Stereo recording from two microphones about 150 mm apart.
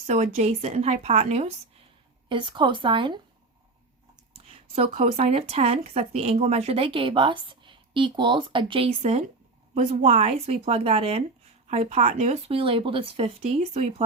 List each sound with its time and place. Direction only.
0.0 s a woman's voice: 45° right (ahead or behind)
2.3 s speech: 30° right (ahead or behind)
4.4 s speech: 45° right (ahead or behind)
9.0 s a woman's voice: 50° right (ahead or behind)
12.5 s speech: 35° right (ahead or behind)